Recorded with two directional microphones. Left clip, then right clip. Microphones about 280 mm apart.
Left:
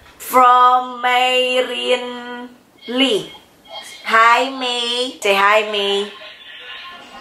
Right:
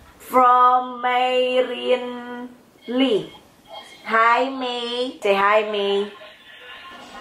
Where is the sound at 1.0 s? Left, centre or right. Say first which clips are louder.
Left 4 dB; centre.